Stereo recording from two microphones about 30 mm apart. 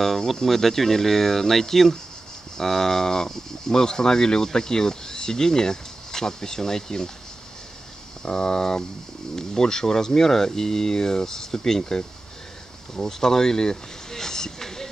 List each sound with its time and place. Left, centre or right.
0.3 s speech: centre
8.2 s speech: left
12.9 s a sound: left